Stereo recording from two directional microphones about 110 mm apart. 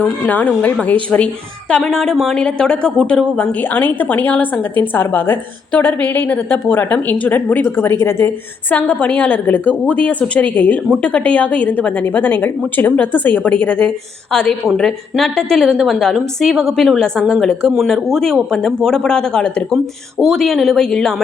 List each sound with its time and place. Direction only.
0.0 s a woman's voice: 15° left (ahead or behind)
14.8 s a woman's voice: centre (ahead or behind)